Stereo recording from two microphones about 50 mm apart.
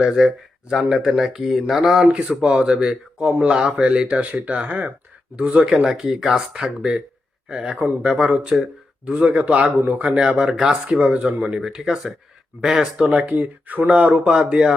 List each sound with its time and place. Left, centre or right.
0.0 s speech: centre
2.1 s speech: right
3.6 s speech: centre
3.8 s speech: centre
4.2 s speech: right
10.1 s speech: centre
13.1 s speech: right
14.1 s speech: centre